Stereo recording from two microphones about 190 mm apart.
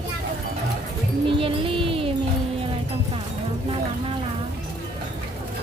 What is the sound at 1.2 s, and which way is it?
Music, 30° right (ahead or behind).